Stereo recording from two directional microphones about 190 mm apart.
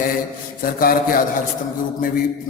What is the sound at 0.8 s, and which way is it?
Speech, 50° left (ahead or behind).